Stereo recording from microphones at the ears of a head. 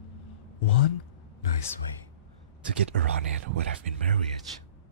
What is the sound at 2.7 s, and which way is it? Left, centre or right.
Speech, right.